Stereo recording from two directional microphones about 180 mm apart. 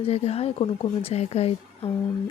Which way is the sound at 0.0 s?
35° left (ahead or behind).